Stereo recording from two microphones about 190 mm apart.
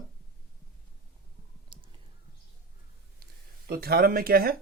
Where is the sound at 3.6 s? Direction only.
55° right (ahead or behind).